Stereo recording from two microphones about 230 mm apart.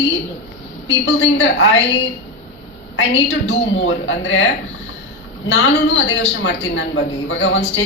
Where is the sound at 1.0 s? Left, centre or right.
Left.